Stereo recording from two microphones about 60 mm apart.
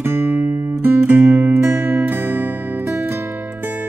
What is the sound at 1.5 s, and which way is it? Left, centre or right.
Music, right.